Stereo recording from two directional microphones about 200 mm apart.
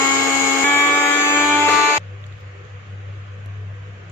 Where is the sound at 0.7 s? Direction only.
10° left (ahead or behind).